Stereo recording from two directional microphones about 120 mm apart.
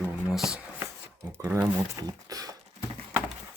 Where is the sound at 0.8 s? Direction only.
15° right (ahead or behind).